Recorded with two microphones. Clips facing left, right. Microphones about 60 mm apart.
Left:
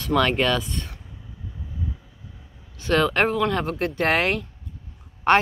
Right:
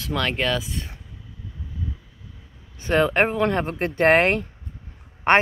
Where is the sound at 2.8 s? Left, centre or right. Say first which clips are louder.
Right 1 dB; right.